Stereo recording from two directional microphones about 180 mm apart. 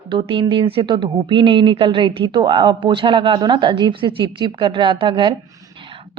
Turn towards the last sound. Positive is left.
turn(degrees=-25)  # may be behind; listen again after turning